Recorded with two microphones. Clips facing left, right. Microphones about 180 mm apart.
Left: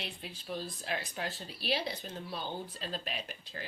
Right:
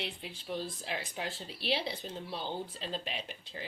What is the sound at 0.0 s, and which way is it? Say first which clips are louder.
Speech: right 2 dB; 20° right (ahead or behind).